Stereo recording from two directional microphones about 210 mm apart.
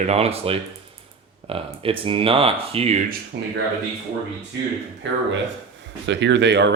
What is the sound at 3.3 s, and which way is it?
Speech, 55° right (ahead or behind).